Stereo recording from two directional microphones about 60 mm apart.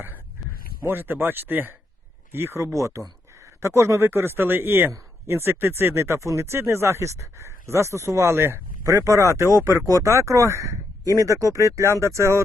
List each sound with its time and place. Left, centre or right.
0.9 s speech: right
2.3 s speech: right
2.7 s speech: right
8.9 s speech: right
9.8 s speech: right